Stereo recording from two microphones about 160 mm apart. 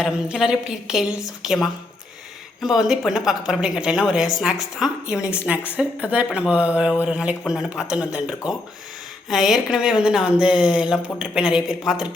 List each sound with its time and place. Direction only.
0.0 s a woman's voice: 5° right (ahead or behind)